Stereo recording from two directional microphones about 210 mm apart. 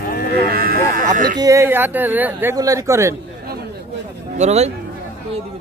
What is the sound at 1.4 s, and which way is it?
Speech, 15° right (ahead or behind).